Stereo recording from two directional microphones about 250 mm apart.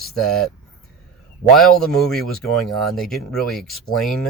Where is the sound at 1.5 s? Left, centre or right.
Centre.